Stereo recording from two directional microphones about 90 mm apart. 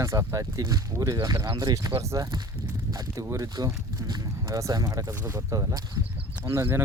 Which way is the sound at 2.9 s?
45° right (ahead or behind).